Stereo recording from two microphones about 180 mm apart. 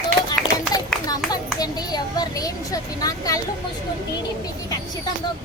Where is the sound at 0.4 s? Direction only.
Centre (ahead or behind).